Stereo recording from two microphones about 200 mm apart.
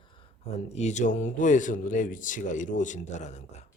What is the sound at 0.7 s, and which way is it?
Speech, 35° left (ahead or behind).